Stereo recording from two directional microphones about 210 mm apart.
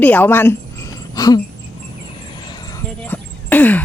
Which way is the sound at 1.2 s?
15° left (ahead or behind).